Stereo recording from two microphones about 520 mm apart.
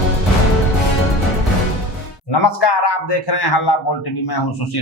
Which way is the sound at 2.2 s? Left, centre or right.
Left.